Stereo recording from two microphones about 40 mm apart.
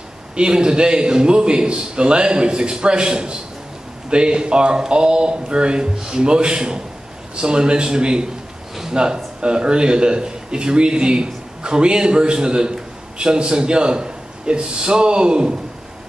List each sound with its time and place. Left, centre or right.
0.4 s a man's voice: right